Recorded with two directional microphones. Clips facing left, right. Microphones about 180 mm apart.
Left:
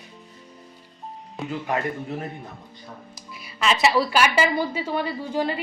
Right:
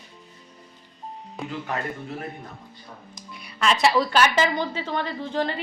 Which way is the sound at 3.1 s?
Centre (ahead or behind).